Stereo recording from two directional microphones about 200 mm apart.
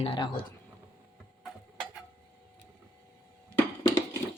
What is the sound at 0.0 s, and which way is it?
Speech, 25° left (ahead or behind).